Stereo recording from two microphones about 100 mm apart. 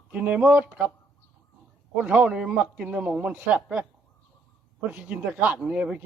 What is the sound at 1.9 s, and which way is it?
A man's voice, 10° right (ahead or behind).